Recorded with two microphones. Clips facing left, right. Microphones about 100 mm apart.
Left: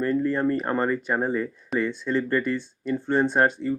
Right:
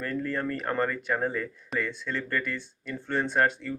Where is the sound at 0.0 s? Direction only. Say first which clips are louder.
Left 7 dB; 20° left (ahead or behind).